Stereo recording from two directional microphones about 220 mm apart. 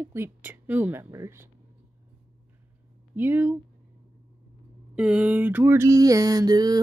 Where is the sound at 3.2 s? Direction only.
10° right (ahead or behind).